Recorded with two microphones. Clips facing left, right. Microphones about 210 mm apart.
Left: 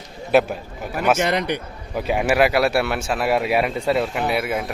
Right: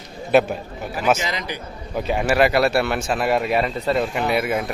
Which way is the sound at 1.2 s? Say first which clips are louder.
Left 7 dB; 65° left (ahead or behind).